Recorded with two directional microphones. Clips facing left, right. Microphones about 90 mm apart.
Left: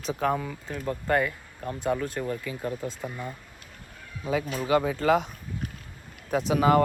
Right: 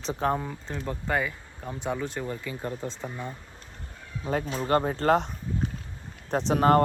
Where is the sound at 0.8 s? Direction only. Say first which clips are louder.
Left 3 dB; centre (ahead or behind).